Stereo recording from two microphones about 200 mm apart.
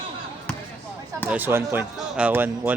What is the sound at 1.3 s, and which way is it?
Speech, 10° right (ahead or behind).